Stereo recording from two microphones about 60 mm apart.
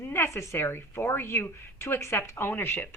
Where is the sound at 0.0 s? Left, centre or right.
Left.